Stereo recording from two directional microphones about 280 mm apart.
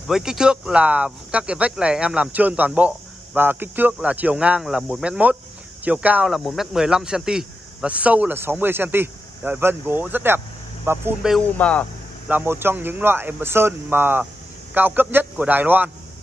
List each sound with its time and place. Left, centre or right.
0.1 s speech: centre
12.3 s speech: centre